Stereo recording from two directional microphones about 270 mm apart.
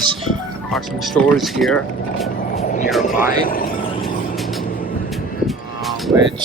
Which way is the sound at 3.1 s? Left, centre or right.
Left.